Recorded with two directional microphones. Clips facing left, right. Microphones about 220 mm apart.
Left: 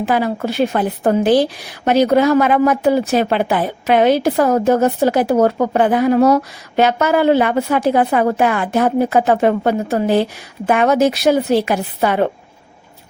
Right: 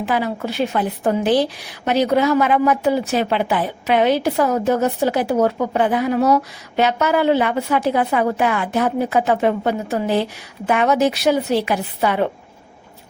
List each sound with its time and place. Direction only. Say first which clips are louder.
0.1 s a woman's voice: left 3 dB; 50° left (ahead or behind)